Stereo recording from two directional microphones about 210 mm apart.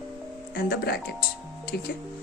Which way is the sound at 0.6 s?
45° left (ahead or behind).